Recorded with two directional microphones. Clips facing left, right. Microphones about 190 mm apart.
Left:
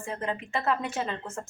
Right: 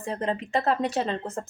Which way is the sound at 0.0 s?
35° right (ahead or behind).